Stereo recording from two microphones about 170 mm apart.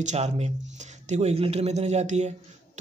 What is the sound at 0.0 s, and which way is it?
A man's voice, 40° right (ahead or behind).